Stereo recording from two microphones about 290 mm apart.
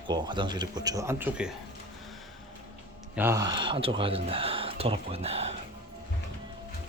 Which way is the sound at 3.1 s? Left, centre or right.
Centre.